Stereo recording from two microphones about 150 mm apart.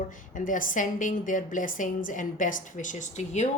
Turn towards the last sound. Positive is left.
turn(degrees=55)  # may be behind; listen again after turning